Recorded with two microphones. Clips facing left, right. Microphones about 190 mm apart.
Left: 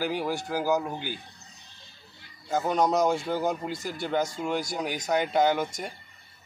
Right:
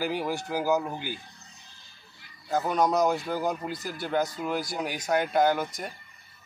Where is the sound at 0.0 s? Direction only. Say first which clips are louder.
Even; 10° right (ahead or behind).